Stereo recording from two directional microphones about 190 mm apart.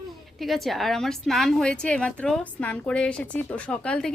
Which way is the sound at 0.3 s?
Centre (ahead or behind).